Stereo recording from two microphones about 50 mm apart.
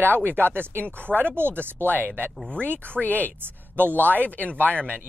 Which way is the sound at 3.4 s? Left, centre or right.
Right.